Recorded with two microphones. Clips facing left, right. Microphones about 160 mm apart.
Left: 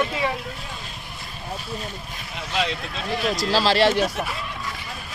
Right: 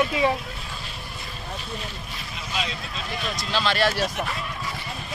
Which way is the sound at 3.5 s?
30° left (ahead or behind).